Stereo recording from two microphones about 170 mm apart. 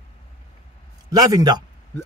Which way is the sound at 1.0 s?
20° right (ahead or behind).